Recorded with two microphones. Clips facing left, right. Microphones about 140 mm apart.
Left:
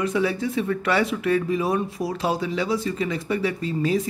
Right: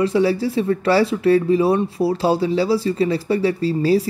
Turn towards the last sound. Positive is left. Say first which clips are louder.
# right 6 dB
turn(degrees=-35)  # may be behind; listen again after turning